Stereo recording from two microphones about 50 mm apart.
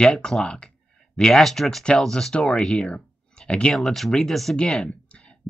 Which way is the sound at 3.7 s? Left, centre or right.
Centre.